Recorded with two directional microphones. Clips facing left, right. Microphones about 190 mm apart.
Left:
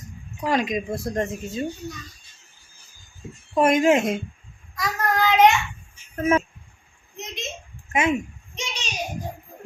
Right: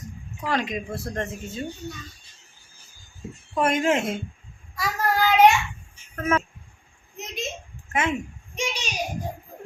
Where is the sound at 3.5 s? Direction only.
15° left (ahead or behind).